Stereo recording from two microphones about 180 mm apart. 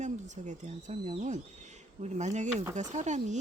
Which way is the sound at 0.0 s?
40° right (ahead or behind).